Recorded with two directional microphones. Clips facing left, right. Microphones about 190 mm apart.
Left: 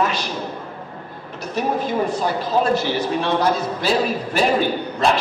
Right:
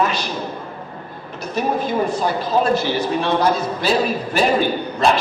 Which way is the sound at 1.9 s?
10° right (ahead or behind).